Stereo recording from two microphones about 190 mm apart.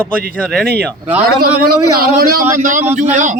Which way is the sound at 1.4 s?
50° right (ahead or behind).